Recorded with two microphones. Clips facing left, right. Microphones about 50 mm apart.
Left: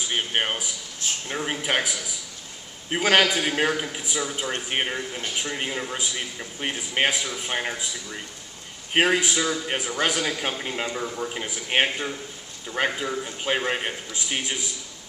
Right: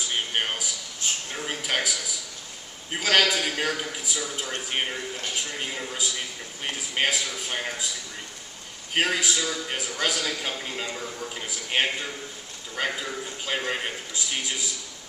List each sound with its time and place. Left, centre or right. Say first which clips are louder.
0.1 s a man's voice: left 3 dB; left
8.9 s a man's voice: left 4 dB; left